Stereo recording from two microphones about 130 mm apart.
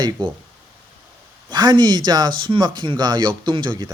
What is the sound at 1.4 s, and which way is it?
Speech, 35° right (ahead or behind).